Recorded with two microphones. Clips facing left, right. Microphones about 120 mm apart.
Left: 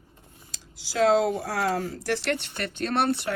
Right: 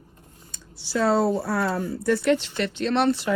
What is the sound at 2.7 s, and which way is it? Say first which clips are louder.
Speech: right 3 dB; 50° left (ahead or behind).